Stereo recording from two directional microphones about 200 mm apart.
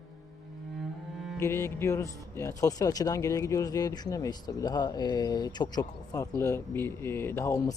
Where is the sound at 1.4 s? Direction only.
10° left (ahead or behind).